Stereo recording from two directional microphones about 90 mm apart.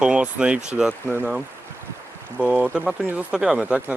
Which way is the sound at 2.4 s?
15° right (ahead or behind).